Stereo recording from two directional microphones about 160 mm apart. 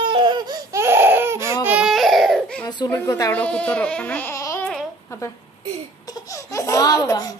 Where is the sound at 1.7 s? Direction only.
5° right (ahead or behind).